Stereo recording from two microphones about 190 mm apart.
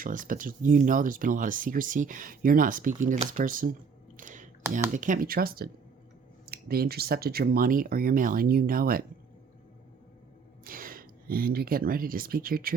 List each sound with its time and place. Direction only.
0.0 s speech: 45° right (ahead or behind)
4.2 s a sound: 45° right (ahead or behind)
4.9 s speech: 45° right (ahead or behind)
10.6 s speech: 45° right (ahead or behind)